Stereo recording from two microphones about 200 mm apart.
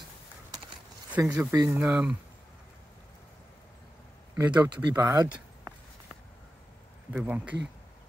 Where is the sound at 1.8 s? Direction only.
5° right (ahead or behind).